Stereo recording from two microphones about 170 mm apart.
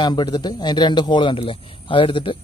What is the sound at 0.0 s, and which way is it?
A man's voice, 25° left (ahead or behind).